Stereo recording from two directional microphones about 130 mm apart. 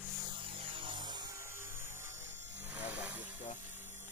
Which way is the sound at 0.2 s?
40° right (ahead or behind).